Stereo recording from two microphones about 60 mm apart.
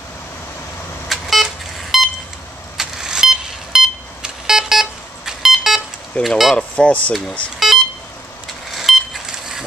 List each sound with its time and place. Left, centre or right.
1.0 s vehicle: centre
6.2 s speech: centre
6.5 s speech: left
7.5 s beep: centre
8.7 s vehicle: centre